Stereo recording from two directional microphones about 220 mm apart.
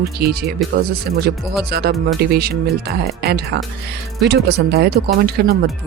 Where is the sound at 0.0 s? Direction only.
45° right (ahead or behind).